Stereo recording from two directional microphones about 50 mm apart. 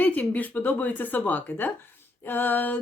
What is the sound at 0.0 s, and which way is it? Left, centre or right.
Speech, left.